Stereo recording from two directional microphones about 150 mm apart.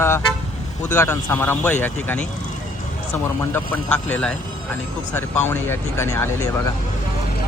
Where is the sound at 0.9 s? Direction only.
15° left (ahead or behind).